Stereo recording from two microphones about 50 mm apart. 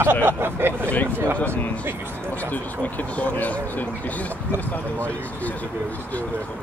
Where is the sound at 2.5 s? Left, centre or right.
Left.